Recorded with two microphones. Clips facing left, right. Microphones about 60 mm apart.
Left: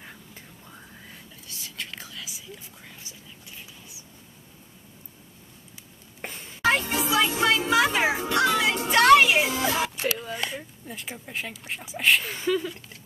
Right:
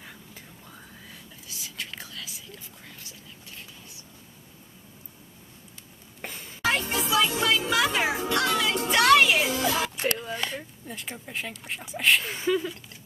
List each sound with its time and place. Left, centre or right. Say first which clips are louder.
1.5 s whispering: even; centre
6.6 s music: left 3 dB; left
8.8 s music: left 3 dB; centre
9.1 s music: left 2 dB; centre
9.7 s speech: even; centre